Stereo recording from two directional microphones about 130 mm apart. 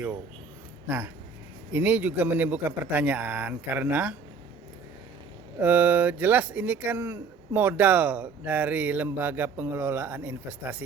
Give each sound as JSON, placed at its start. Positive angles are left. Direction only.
{"t": 0.9, "sound": "speech", "side_deg": -15}
{"t": 5.5, "sound": "speech", "side_deg": -15}